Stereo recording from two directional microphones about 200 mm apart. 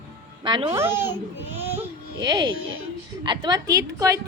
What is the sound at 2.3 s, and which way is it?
A woman's voice, 20° right (ahead or behind).